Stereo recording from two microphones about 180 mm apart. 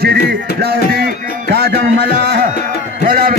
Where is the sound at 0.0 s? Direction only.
65° right (ahead or behind).